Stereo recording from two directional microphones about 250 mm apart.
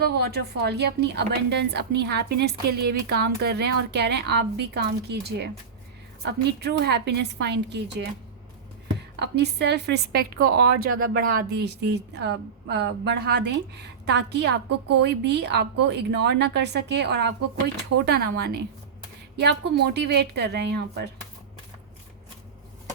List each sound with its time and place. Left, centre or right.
0.0 s a woman's voice: right
9.1 s a woman's voice: right